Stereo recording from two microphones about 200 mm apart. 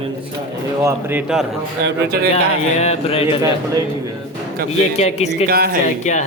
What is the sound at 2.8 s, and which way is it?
Speech, 30° left (ahead or behind).